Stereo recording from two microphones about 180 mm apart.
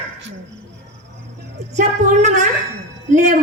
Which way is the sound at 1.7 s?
40° right (ahead or behind).